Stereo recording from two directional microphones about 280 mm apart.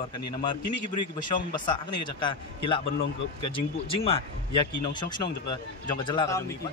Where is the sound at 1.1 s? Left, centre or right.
Centre.